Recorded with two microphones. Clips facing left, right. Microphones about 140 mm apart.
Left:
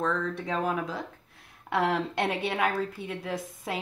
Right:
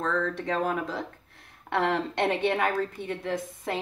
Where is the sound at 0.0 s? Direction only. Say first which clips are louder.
Right 1 dB; 5° left (ahead or behind).